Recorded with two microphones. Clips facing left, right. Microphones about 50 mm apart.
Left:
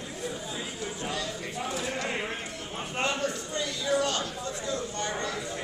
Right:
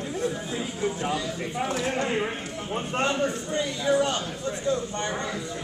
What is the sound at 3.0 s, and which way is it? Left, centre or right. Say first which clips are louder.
A man's voice: right 3 dB; right.